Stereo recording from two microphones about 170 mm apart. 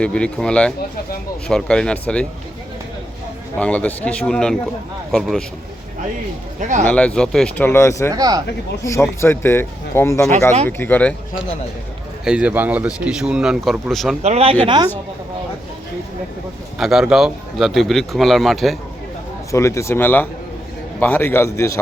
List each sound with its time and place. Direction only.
0.0 s speech: 5° left (ahead or behind)
3.6 s speech: 10° left (ahead or behind)
6.6 s speech: 45° right (ahead or behind)
6.8 s speech: 5° left (ahead or behind)
8.1 s speech: 20° right (ahead or behind)
8.8 s speech: 15° left (ahead or behind)
12.2 s speech: 5° right (ahead or behind)
14.2 s speech: 40° right (ahead or behind)
16.7 s speech: centre (ahead or behind)
19.5 s speech: 15° left (ahead or behind)